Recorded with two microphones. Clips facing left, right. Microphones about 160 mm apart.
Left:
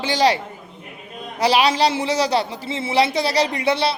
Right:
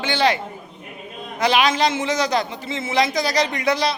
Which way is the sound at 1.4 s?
35° left (ahead or behind).